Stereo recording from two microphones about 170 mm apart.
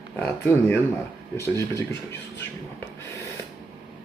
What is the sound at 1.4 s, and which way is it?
Speech, 15° left (ahead or behind).